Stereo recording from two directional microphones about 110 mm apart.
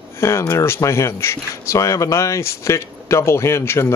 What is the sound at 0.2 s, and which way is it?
Speech, 25° left (ahead or behind).